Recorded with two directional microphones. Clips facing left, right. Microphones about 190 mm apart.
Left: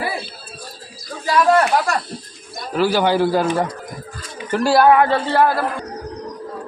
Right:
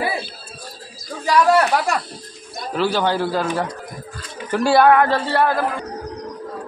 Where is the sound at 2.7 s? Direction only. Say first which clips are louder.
Left 3 dB; 5° left (ahead or behind).